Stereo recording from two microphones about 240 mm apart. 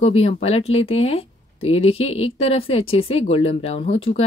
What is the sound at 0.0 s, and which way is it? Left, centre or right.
Speech, left.